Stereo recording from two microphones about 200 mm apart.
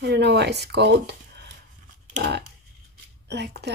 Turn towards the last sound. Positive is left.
turn(degrees=-55)  # may be behind; listen again after turning